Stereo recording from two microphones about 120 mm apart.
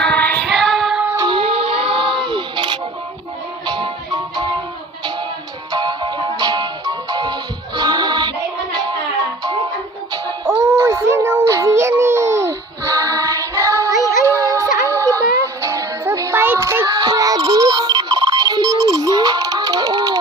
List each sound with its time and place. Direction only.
0.0 s child singing: 10° left (ahead or behind)
0.4 s music: centre (ahead or behind)
1.2 s music: 45° right (ahead or behind)
5.7 s music: 40° right (ahead or behind)
10.1 s music: 30° right (ahead or behind)